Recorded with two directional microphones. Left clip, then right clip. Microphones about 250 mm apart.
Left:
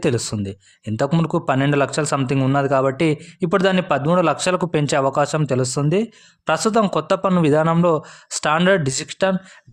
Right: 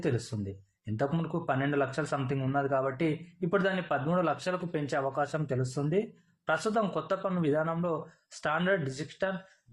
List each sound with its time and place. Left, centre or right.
0.0 s a man's voice: left